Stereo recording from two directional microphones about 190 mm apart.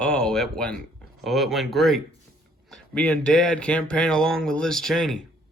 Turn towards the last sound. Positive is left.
turn(degrees=0)  # may be behind; listen again after turning